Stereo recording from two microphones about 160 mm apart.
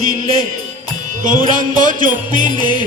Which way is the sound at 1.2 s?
55° right (ahead or behind).